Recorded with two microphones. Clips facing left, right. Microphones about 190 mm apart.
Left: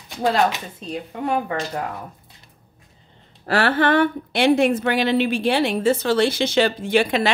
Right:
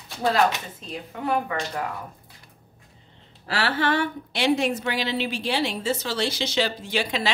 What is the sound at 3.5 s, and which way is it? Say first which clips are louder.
A woman's voice: left 6 dB; 50° left (ahead or behind).